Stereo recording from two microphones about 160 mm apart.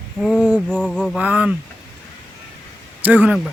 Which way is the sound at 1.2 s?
10° right (ahead or behind).